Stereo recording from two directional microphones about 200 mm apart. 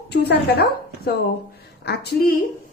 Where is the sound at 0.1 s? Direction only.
55° left (ahead or behind).